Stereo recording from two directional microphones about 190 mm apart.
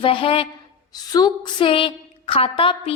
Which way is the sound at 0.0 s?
30° left (ahead or behind).